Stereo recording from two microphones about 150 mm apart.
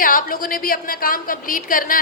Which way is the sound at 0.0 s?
65° left (ahead or behind).